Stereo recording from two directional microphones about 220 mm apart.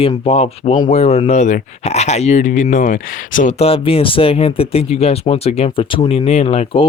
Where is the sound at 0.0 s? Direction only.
25° left (ahead or behind).